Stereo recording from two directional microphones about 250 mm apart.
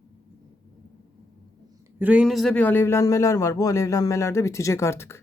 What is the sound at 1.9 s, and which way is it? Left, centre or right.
Speech, centre.